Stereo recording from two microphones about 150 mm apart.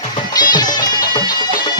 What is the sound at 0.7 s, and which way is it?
Bagpipes, 30° left (ahead or behind).